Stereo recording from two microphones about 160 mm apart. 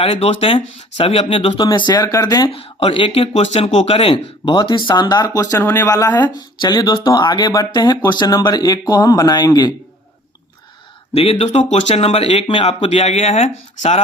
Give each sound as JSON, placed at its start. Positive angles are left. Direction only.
{"t": 0.0, "sound": "speech", "side_deg": 40}
{"t": 2.5, "sound": "speech", "side_deg": 35}
{"t": 4.4, "sound": "speech", "side_deg": 25}
{"t": 6.6, "sound": "speech", "side_deg": 25}
{"t": 11.1, "sound": "speech", "side_deg": 35}